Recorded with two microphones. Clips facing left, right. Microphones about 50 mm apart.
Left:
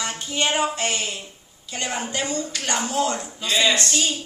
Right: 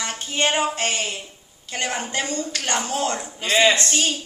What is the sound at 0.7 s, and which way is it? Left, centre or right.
A woman's voice, right.